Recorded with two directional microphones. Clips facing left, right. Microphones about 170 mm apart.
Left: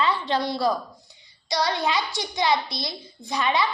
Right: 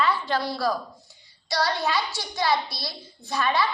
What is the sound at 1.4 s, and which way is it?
A child's voice, 20° left (ahead or behind).